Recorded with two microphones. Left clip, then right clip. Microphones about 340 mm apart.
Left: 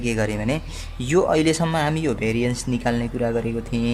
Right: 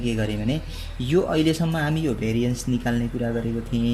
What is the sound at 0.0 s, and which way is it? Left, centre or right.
Speech, centre.